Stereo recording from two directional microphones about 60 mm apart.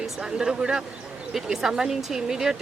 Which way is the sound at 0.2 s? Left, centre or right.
Centre.